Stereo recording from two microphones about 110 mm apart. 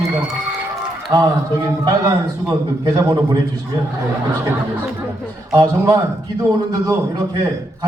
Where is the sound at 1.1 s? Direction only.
35° right (ahead or behind).